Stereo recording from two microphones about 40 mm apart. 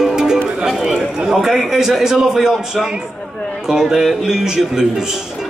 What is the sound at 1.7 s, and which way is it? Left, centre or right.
A man's voice, centre.